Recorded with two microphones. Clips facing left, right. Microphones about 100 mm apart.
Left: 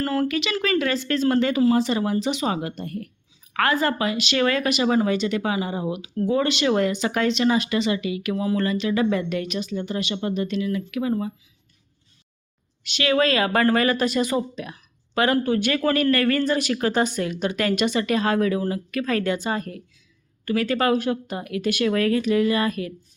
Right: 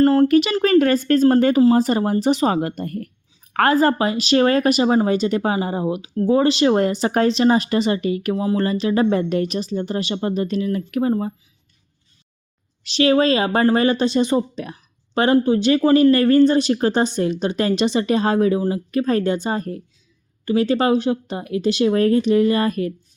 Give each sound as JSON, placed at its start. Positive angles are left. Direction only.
{"t": 0.0, "sound": "speech", "side_deg": -30}
{"t": 0.3, "sound": "speech", "side_deg": -45}
{"t": 12.8, "sound": "speech", "side_deg": -35}